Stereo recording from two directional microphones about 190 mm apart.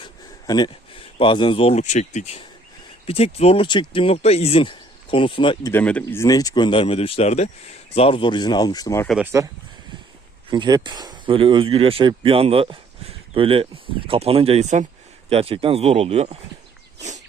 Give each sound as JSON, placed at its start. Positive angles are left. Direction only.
{"t": 0.0, "sound": "speech", "side_deg": 20}
{"t": 5.7, "sound": "speech", "side_deg": 5}
{"t": 9.0, "sound": "speech", "side_deg": -5}
{"t": 10.5, "sound": "speech", "side_deg": -20}